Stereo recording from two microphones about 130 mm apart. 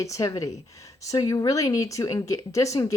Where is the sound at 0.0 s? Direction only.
25° left (ahead or behind).